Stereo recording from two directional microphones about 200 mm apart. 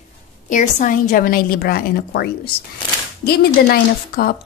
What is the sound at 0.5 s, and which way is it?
A woman's voice, 40° left (ahead or behind).